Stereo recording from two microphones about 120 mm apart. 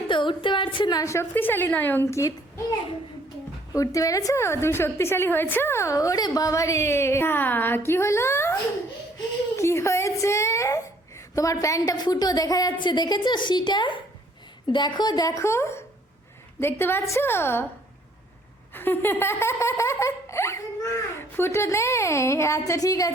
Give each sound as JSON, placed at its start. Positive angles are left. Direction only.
{"t": 0.1, "sound": "a sound", "side_deg": 40}
{"t": 0.9, "sound": "a woman's voice", "side_deg": 30}
{"t": 3.7, "sound": "a woman's voice", "side_deg": 30}
{"t": 9.6, "sound": "a sound", "side_deg": 25}
{"t": 11.3, "sound": "a woman's voice", "side_deg": 25}
{"t": 18.7, "sound": "a woman's voice", "side_deg": 15}